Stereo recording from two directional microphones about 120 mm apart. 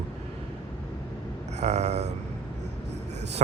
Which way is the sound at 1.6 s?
70° right (ahead or behind).